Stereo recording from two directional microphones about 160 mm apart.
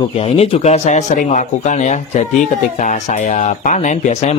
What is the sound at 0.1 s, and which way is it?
Speech, 40° left (ahead or behind).